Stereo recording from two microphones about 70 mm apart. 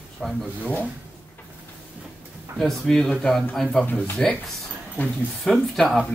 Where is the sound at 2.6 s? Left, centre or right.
Centre.